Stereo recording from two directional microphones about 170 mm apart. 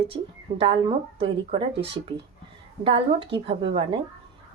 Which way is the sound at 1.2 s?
35° right (ahead or behind).